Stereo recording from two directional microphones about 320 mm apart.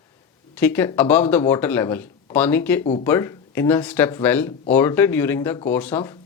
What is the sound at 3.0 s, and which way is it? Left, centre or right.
Speech, centre.